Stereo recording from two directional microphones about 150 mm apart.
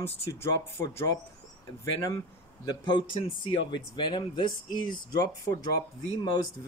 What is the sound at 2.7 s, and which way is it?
Speech, 30° left (ahead or behind).